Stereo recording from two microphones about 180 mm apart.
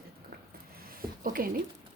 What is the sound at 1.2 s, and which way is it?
Speech, 50° right (ahead or behind).